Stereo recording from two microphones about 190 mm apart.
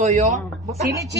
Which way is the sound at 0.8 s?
15° right (ahead or behind).